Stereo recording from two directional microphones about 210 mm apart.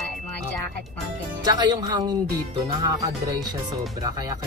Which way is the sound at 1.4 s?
20° right (ahead or behind).